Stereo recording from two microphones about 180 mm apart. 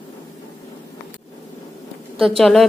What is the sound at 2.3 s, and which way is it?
Speech, centre (ahead or behind).